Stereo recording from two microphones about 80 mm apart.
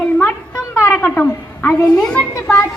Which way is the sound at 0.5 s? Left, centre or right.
Left.